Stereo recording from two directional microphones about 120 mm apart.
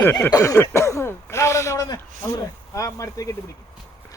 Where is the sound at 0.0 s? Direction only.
15° left (ahead or behind).